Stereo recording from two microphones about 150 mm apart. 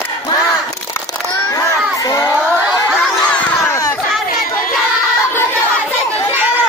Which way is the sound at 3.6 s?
15° left (ahead or behind).